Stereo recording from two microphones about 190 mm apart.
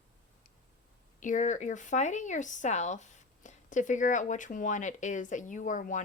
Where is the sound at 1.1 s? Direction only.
40° left (ahead or behind).